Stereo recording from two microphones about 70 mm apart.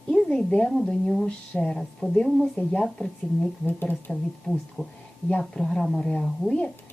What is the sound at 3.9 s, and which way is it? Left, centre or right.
Speech, centre.